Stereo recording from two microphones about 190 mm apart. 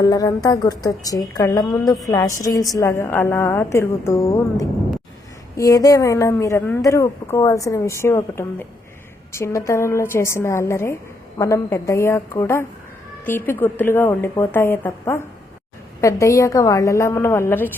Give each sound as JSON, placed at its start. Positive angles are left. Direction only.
{"t": 0.0, "sound": "a woman's voice", "side_deg": 20}